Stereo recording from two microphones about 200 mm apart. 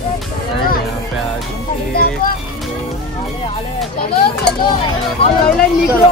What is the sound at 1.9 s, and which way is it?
Speech, 50° left (ahead or behind).